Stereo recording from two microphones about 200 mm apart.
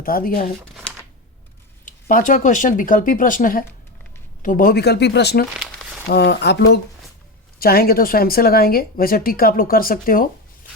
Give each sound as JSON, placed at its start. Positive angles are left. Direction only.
{"t": 0.0, "sound": "speech", "side_deg": 45}
{"t": 1.8, "sound": "speech", "side_deg": 40}
{"t": 7.6, "sound": "speech", "side_deg": 50}